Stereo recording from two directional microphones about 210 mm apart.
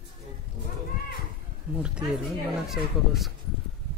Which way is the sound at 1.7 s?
5° right (ahead or behind).